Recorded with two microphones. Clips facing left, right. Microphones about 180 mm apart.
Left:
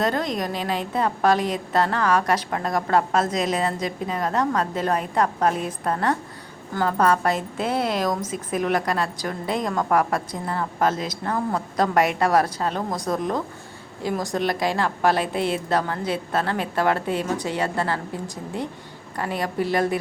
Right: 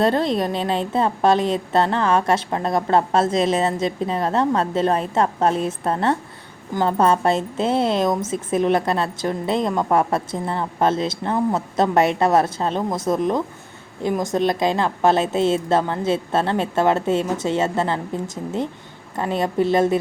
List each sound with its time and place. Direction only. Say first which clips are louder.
0.0 s a woman's voice: right 5 dB; 30° right (ahead or behind)
19.1 s a woman's voice: right 5 dB; 25° right (ahead or behind)